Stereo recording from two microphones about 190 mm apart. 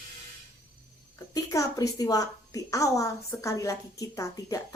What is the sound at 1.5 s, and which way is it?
A child's voice, 15° left (ahead or behind).